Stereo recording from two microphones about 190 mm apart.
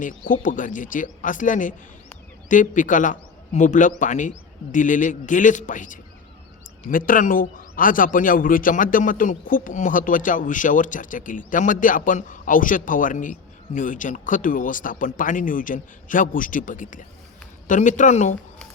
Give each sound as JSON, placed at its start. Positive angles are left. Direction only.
{"t": 0.0, "sound": "a man's voice", "side_deg": 45}